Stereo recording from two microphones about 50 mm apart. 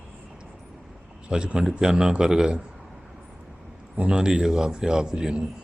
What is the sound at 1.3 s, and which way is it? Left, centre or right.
A man's voice, centre.